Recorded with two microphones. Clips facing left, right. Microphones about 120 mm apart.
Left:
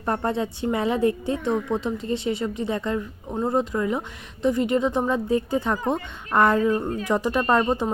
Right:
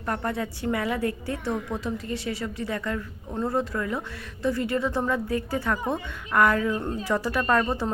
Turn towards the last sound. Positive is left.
turn(degrees=15)  # may be behind; listen again after turning